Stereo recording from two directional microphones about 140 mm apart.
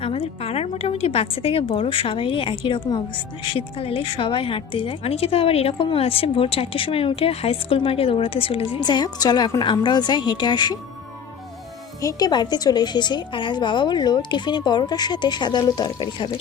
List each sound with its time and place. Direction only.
0.0 s a woman's voice: 45° left (ahead or behind)
8.8 s a woman's voice: 30° left (ahead or behind)
12.0 s a woman's voice: 30° left (ahead or behind)